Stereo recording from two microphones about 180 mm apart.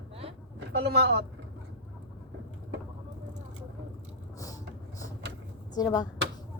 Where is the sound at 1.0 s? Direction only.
70° right (ahead or behind).